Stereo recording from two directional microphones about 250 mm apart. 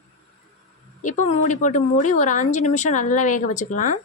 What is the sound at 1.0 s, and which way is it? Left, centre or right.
Speech, left.